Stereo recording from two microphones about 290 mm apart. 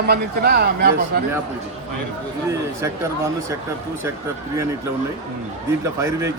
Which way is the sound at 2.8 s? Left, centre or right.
Centre.